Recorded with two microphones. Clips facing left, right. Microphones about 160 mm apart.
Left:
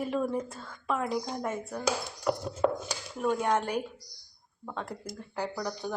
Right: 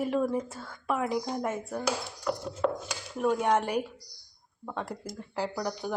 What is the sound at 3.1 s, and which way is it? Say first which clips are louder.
Speech: right 2 dB; 5° right (ahead or behind).